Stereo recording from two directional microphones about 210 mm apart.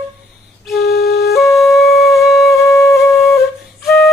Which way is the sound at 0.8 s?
50° left (ahead or behind).